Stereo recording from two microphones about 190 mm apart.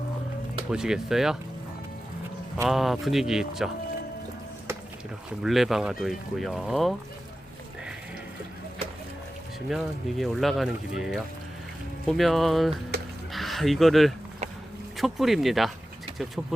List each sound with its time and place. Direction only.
0.7 s speech: 5° right (ahead or behind)
2.6 s speech: centre (ahead or behind)
5.4 s speech: centre (ahead or behind)
9.6 s speech: centre (ahead or behind)
12.9 s a sound: 60° right (ahead or behind)
13.3 s speech: centre (ahead or behind)